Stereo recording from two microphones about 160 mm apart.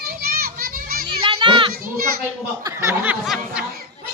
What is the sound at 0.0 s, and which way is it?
Children playing, 70° right (ahead or behind).